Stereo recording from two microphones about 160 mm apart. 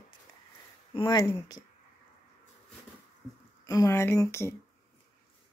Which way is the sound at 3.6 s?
20° left (ahead or behind).